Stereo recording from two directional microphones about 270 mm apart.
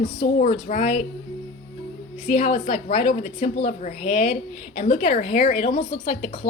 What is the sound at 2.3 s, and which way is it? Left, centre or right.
A woman's voice, left.